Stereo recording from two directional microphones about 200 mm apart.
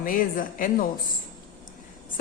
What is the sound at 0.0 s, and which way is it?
Speech, 45° left (ahead or behind).